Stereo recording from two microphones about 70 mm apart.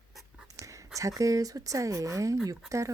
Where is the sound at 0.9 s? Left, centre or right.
Right.